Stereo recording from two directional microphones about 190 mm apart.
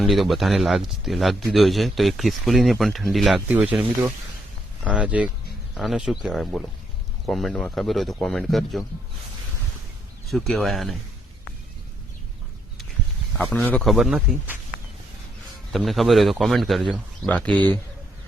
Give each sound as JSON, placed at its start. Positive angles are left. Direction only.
{"t": 0.0, "sound": "speech", "side_deg": 0}
{"t": 4.9, "sound": "speech", "side_deg": -5}
{"t": 10.2, "sound": "speech", "side_deg": 0}
{"t": 13.3, "sound": "speech", "side_deg": 10}
{"t": 15.7, "sound": "speech", "side_deg": 0}